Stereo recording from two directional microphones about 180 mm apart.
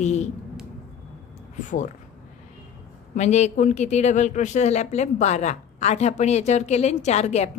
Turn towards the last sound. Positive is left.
turn(degrees=40)  # may be behind; listen again after turning